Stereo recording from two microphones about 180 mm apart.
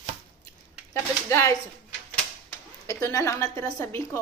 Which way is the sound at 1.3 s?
15° left (ahead or behind).